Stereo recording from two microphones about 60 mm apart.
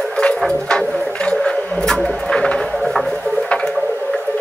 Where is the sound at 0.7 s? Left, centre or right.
Centre.